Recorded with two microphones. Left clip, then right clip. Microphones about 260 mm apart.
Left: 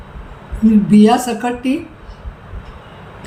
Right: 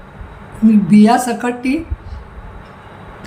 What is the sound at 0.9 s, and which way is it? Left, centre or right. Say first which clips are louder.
Speech: even; centre.